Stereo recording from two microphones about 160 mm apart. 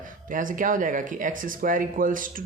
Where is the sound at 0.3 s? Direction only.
55° right (ahead or behind).